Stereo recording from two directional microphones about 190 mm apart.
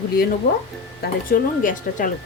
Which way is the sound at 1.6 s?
45° left (ahead or behind).